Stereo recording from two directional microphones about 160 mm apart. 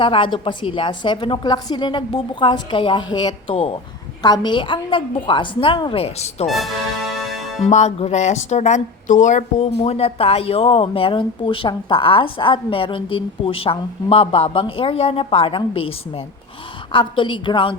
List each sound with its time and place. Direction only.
0.0 s a woman's voice: 30° left (ahead or behind)
4.2 s speech: 25° left (ahead or behind)
6.5 s music: centre (ahead or behind)
7.7 s speech: 45° left (ahead or behind); by 17.7 s 30° left (ahead or behind)